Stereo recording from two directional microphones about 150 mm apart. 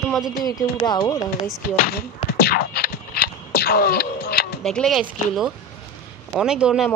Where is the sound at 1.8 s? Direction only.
90° left.